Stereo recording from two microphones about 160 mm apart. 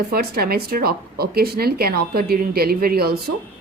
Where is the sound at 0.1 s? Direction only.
70° right (ahead or behind).